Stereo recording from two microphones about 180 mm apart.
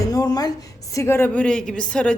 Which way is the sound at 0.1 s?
20° left (ahead or behind).